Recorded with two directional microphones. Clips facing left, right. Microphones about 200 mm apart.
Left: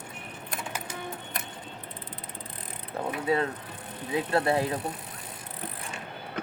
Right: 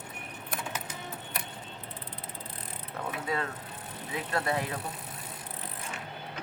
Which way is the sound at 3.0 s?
25° left (ahead or behind).